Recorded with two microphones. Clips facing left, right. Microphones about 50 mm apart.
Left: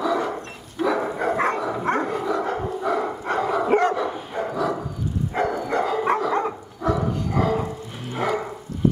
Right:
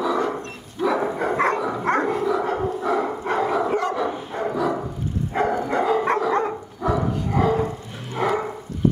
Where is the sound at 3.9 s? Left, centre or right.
Centre.